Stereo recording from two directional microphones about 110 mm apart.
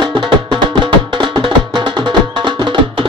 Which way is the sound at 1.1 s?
45° right (ahead or behind).